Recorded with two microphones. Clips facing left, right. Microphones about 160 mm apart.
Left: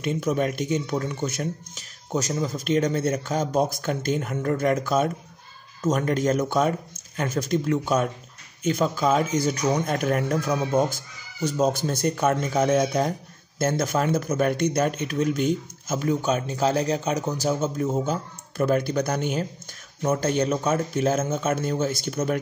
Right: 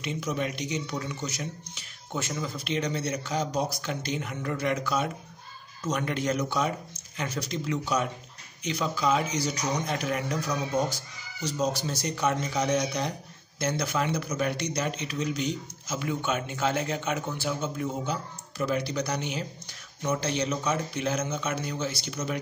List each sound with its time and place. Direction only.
0.0 s speech: 50° left (ahead or behind)